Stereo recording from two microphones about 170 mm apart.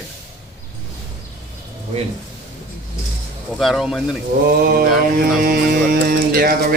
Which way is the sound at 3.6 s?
Centre (ahead or behind).